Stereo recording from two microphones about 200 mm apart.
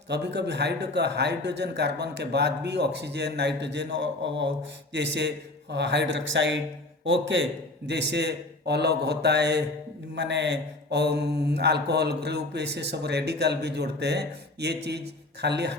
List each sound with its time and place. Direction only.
0.1 s mantra: 60° right (ahead or behind)
7.0 s speech: 70° right (ahead or behind)
7.9 s mantra: 60° right (ahead or behind)